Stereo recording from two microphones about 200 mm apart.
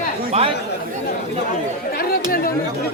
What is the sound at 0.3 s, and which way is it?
Speech, 30° right (ahead or behind).